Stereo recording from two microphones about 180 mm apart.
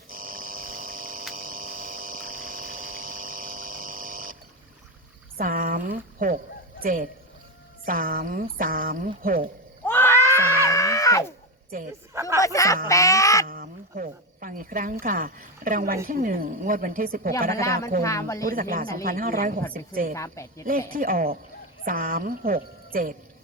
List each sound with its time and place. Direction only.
0.1 s hum: 50° right (ahead or behind)
1.3 s pump: 50° right (ahead or behind)
5.4 s speech: 50° right (ahead or behind)
9.8 s a sound: 10° left (ahead or behind)
10.7 s screaming: 20° left (ahead or behind)
12.4 s speech: 15° left (ahead or behind)
12.9 s duck: 15° left (ahead or behind)
13.5 s cricket: 55° right (ahead or behind)
15.0 s speech: 50° right (ahead or behind)
17.5 s speech: 15° left (ahead or behind)
18.4 s speech: 55° right (ahead or behind)
20.1 s speech: 15° left (ahead or behind)
20.7 s speech: 50° right (ahead or behind)